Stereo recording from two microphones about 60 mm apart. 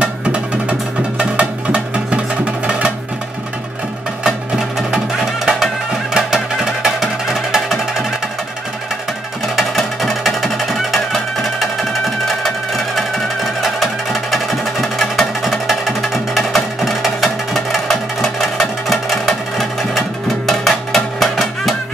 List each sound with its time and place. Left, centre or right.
0.0 s music: centre
4.2 s music: centre
9.8 s music: centre
12.3 s music: centre